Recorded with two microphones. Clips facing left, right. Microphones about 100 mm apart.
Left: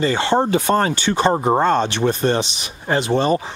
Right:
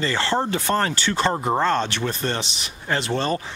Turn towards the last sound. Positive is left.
turn(degrees=15)  # may be behind; listen again after turning